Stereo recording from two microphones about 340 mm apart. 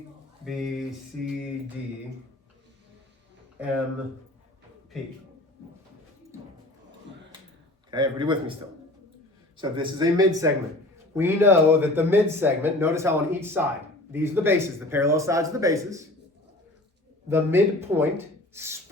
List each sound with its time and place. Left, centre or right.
0.4 s a sound: centre
7.9 s speech: centre
9.6 s speech: centre
17.2 s speech: centre